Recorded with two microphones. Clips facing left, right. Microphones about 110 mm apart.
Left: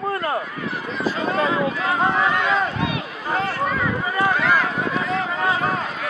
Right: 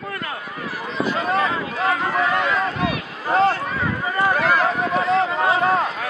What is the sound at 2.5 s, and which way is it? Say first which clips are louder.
Run: even; 25° left (ahead or behind).